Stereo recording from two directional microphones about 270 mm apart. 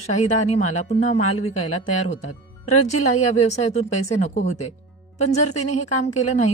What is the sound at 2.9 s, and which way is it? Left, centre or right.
A woman's voice, left.